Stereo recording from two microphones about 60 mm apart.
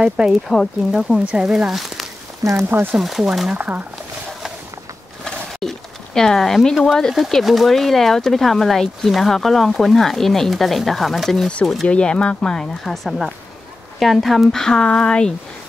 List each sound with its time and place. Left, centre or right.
0.0 s speech: centre
1.7 s speech: centre
2.7 s speech: right
3.0 s speech: centre
3.5 s speech: right
5.2 s pigeon: centre
7.0 s speech: centre
11.4 s speech: centre